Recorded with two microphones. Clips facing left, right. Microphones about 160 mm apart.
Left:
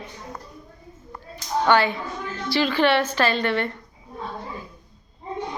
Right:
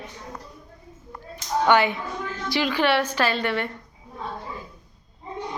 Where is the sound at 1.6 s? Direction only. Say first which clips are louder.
Even; 15° right (ahead or behind).